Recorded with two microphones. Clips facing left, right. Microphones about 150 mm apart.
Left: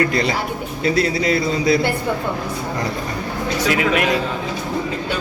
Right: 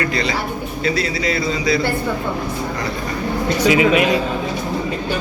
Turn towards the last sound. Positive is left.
turn(degrees=-5)  # may be behind; listen again after turning